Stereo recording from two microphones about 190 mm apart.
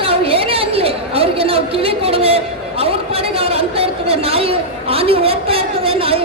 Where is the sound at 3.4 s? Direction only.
30° right (ahead or behind).